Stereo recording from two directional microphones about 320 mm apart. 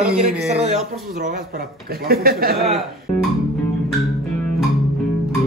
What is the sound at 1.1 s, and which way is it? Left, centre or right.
A man's voice, right.